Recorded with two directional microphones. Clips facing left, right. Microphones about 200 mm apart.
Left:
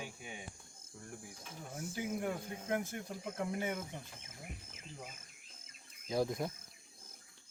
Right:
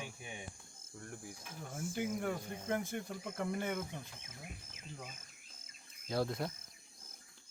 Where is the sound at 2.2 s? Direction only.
10° left (ahead or behind).